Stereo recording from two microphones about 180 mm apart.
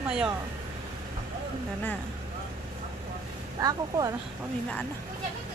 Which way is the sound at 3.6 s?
20° right (ahead or behind).